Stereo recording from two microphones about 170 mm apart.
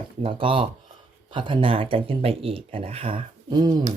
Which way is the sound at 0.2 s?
30° right (ahead or behind).